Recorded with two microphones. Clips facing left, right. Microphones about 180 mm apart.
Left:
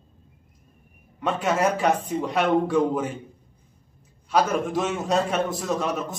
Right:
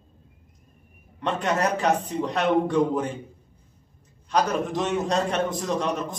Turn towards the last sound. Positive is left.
turn(degrees=5)  # may be behind; listen again after turning